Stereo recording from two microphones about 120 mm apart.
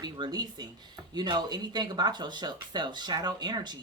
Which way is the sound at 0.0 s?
35° right (ahead or behind).